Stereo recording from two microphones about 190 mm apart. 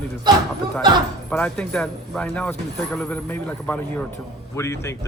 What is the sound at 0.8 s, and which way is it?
Speech, 20° right (ahead or behind).